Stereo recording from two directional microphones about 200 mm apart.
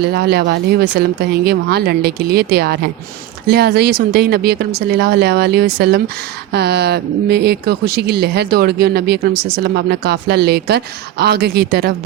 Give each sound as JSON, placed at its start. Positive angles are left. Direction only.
{"t": 0.0, "sound": "speech", "side_deg": -55}